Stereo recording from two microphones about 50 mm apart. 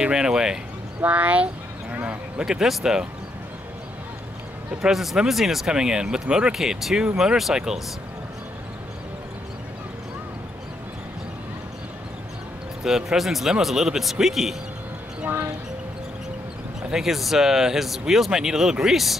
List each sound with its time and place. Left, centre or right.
0.0 s speech: centre
1.0 s speech: right
2.4 s speech: centre
4.8 s speech: centre
12.8 s speech: centre
15.2 s speech: right
16.8 s speech: centre